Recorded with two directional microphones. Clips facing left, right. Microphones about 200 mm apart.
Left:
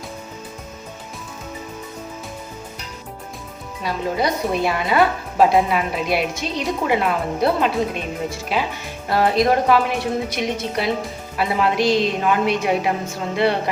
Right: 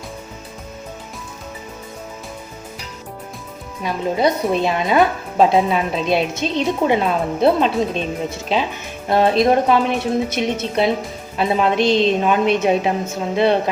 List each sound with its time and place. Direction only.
4.5 s a woman's voice: 20° right (ahead or behind)